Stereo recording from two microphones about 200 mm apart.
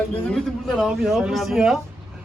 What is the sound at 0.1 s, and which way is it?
Speech, 5° left (ahead or behind).